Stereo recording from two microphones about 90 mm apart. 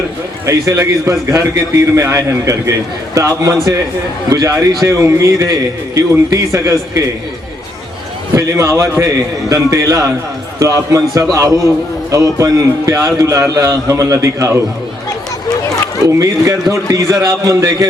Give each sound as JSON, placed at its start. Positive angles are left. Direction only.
{"t": 0.4, "sound": "a man's voice", "side_deg": -35}
{"t": 8.4, "sound": "a man's voice", "side_deg": -35}
{"t": 12.4, "sound": "a man's voice", "side_deg": -35}
{"t": 16.0, "sound": "a man's voice", "side_deg": -35}